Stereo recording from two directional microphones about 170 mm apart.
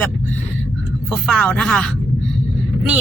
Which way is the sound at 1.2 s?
5° left (ahead or behind).